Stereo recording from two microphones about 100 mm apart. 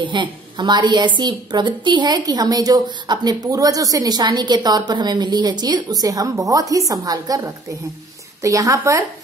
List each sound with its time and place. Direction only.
0.0 s a woman's voice: 50° right (ahead or behind); by 9.0 s 30° right (ahead or behind)